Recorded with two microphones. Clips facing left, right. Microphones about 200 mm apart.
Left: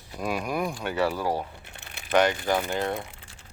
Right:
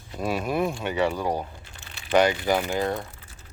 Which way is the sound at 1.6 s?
60° left (ahead or behind).